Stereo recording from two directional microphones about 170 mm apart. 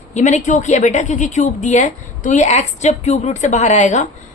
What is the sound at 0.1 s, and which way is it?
A woman's voice, 45° left (ahead or behind).